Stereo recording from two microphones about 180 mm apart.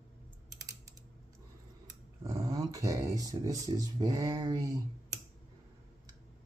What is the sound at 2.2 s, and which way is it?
Speech, 20° right (ahead or behind).